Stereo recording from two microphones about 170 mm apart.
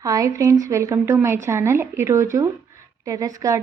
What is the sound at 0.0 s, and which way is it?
A woman's voice, 20° right (ahead or behind).